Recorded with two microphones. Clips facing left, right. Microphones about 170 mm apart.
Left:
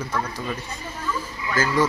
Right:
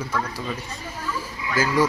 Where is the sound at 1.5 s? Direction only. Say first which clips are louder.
Right 1 dB; 10° right (ahead or behind).